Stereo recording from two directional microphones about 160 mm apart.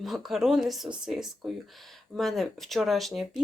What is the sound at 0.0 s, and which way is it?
Speech, centre (ahead or behind).